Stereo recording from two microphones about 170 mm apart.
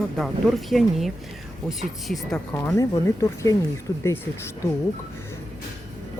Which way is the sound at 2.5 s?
20° left (ahead or behind).